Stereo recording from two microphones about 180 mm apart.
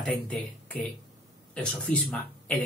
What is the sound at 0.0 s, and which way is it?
Speech, 5° left (ahead or behind).